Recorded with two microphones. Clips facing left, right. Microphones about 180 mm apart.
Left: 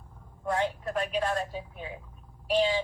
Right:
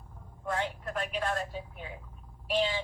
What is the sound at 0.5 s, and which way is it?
Speech, 25° left (ahead or behind).